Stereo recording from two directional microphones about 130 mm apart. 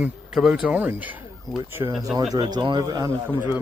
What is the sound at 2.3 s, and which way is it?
Speech, 40° right (ahead or behind).